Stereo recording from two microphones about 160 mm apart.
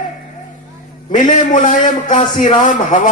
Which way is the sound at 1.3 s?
50° left (ahead or behind).